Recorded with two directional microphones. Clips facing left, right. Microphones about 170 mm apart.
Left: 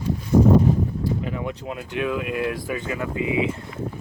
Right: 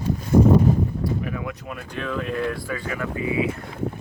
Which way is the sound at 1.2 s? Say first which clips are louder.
Left 1 dB; 25° left (ahead or behind).